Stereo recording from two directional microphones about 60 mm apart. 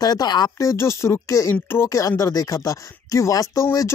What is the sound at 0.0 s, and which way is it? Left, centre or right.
Speech, left.